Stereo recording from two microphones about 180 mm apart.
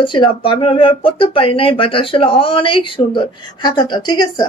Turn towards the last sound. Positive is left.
turn(degrees=25)  # may be behind; listen again after turning